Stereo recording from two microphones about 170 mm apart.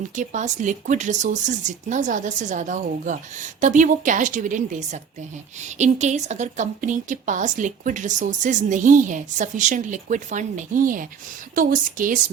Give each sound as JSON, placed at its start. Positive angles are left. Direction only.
{"t": 0.2, "sound": "a woman's voice", "side_deg": -45}